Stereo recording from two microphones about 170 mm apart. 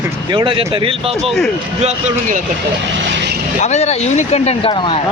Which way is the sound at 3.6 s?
40° left (ahead or behind).